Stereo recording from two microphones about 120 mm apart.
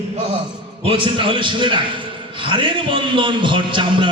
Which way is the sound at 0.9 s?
45° right (ahead or behind).